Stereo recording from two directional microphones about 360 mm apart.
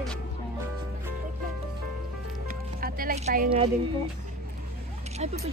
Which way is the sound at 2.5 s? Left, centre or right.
Right.